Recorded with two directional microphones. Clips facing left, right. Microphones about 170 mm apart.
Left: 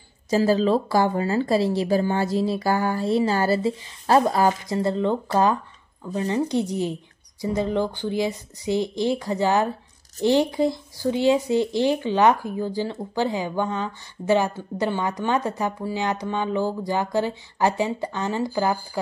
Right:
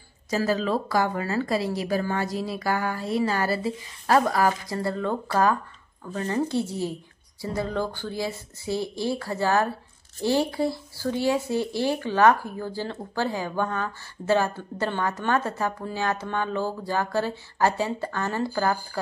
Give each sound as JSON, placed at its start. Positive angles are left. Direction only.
{"t": 0.3, "sound": "speech", "side_deg": 30}